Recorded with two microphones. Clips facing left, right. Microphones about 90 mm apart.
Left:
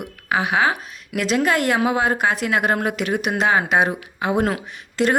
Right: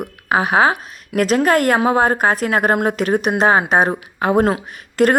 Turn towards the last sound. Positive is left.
turn(degrees=-50)  # may be behind; listen again after turning